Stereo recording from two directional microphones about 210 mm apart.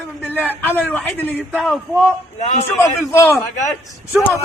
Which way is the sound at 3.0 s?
10° left (ahead or behind).